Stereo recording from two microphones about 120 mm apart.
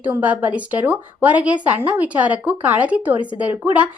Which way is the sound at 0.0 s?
15° right (ahead or behind).